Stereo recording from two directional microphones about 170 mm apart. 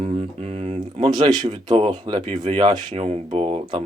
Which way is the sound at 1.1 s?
25° right (ahead or behind).